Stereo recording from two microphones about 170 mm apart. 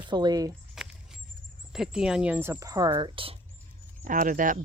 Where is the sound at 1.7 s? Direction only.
5° right (ahead or behind); by 3.3 s 30° right (ahead or behind).